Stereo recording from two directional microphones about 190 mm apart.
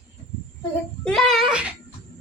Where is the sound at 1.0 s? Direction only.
Centre (ahead or behind).